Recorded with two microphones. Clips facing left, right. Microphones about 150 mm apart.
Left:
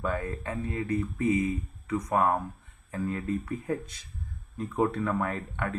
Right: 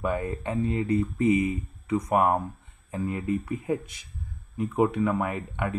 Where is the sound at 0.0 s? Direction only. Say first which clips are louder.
Right 3 dB; 15° right (ahead or behind).